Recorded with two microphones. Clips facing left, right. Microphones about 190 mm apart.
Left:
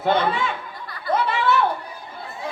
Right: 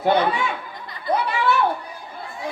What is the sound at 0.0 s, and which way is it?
Speech, 15° right (ahead or behind).